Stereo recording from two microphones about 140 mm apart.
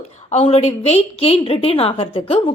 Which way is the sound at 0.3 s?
50° left (ahead or behind).